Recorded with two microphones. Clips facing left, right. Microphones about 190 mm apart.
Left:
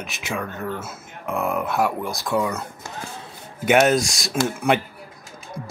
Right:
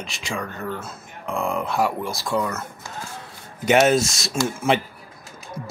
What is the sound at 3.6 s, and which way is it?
Speech, centre (ahead or behind).